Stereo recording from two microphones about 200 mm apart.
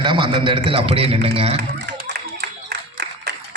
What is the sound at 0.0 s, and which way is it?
A man's voice, 25° right (ahead or behind).